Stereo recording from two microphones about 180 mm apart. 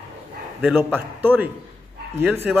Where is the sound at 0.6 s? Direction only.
10° right (ahead or behind).